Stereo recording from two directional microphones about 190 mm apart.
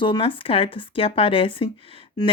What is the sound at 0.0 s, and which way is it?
Speech, 25° left (ahead or behind).